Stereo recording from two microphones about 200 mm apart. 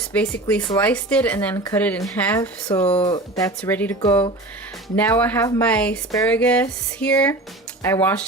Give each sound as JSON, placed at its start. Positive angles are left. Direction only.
{"t": 0.1, "sound": "speech", "side_deg": 5}
{"t": 2.8, "sound": "speech", "side_deg": 30}
{"t": 3.1, "sound": "speech", "side_deg": 15}